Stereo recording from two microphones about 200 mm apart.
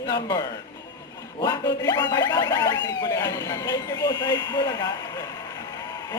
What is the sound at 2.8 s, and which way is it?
Speech, 20° left (ahead or behind).